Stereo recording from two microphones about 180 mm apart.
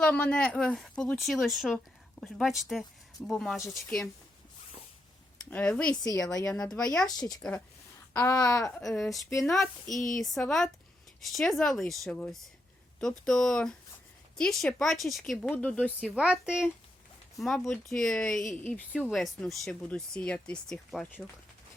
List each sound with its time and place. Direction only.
0.0 s speech: 5° left (ahead or behind)
5.5 s speech: 10° left (ahead or behind)
5.9 s speech: 20° left (ahead or behind)
6.4 s speech: 5° left (ahead or behind)
7.2 s speech: 20° left (ahead or behind)
8.8 s speech: centre (ahead or behind)
16.1 s speech: 5° right (ahead or behind)